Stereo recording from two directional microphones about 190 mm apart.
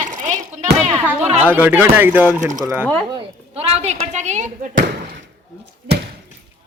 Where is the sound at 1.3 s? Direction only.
10° right (ahead or behind).